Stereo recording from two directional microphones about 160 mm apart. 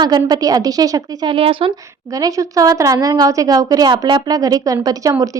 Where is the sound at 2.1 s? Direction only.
20° right (ahead or behind).